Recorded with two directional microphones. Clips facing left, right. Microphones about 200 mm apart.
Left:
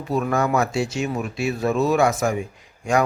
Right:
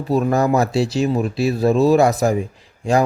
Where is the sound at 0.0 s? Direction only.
35° right (ahead or behind).